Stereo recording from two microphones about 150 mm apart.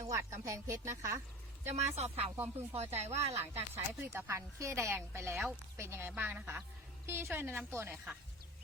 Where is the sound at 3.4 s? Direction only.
15° right (ahead or behind).